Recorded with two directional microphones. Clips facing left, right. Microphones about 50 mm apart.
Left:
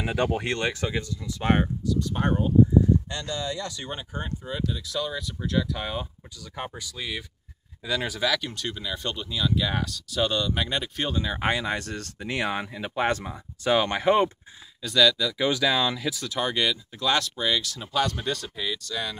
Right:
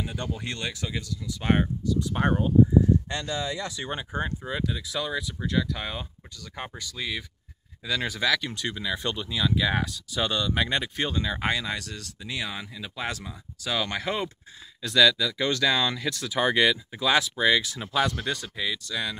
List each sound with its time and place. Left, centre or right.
0.0 s speech: left
0.4 s speech: left
1.4 s speech: centre
2.0 s speech: centre
11.4 s speech: left
14.8 s speech: centre
15.4 s speech: centre
16.3 s speech: centre
18.1 s speech: centre